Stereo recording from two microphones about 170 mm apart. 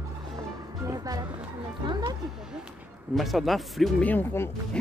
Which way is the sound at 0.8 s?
20° right (ahead or behind).